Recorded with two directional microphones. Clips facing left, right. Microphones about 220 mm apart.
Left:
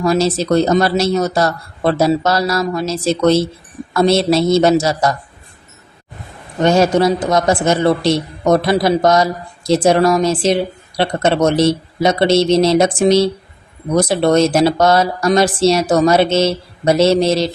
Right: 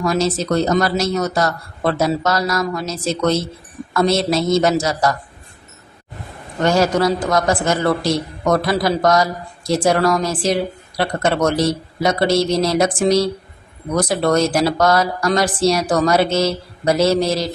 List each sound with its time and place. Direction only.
0.0 s a man's voice: 30° left (ahead or behind)
6.6 s a man's voice: 20° left (ahead or behind)